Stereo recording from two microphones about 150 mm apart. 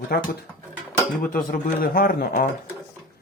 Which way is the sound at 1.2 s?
70° left (ahead or behind).